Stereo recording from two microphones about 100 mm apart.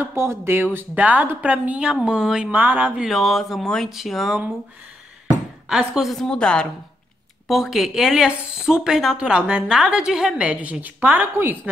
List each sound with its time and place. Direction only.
0.0 s speech: 25° right (ahead or behind)
3.1 s speech: centre (ahead or behind)
5.7 s speech: 5° right (ahead or behind)